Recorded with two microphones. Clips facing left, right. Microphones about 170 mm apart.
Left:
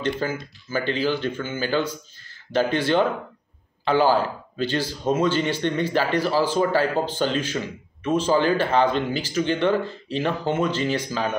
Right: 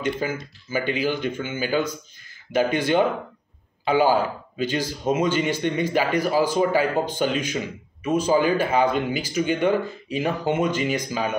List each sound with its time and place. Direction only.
0.0 s speech: 10° right (ahead or behind)